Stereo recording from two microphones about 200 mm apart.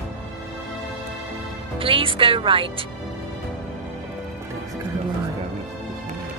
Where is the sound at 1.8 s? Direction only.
25° right (ahead or behind).